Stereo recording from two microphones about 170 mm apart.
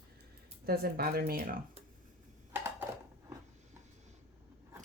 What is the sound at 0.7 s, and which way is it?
Speech, 65° right (ahead or behind).